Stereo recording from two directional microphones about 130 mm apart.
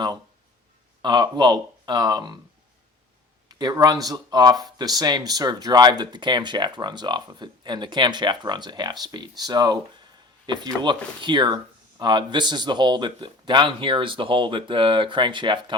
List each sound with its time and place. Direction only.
1.0 s speech: 35° right (ahead or behind)
3.5 s a man's voice: 30° right (ahead or behind)